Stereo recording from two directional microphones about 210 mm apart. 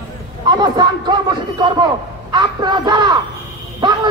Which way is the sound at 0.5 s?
20° right (ahead or behind).